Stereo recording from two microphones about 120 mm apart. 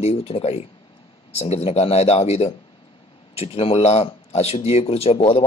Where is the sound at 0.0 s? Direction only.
55° left (ahead or behind).